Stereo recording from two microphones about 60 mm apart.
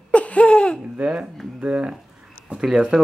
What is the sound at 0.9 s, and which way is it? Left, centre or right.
Speech, right.